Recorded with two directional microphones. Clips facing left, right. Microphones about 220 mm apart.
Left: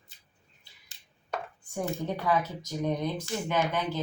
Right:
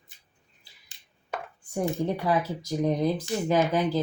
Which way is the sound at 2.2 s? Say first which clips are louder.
Right 2 dB; 35° right (ahead or behind).